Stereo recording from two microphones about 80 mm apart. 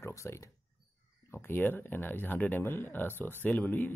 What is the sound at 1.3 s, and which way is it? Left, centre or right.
Speech, left.